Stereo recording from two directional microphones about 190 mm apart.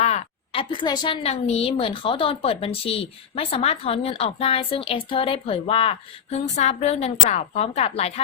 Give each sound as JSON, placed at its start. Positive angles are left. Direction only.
{"t": 0.0, "sound": "a woman's voice", "side_deg": 35}